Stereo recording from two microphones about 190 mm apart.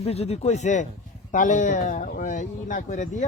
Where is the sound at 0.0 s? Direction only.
35° left (ahead or behind).